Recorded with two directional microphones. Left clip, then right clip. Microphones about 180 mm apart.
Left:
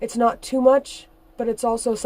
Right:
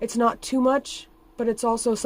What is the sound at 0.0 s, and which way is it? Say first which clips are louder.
Speech: left 2 dB; 40° right (ahead or behind).